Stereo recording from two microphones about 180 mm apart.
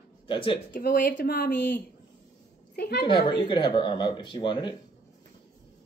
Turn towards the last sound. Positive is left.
turn(degrees=25)  # may be behind; listen again after turning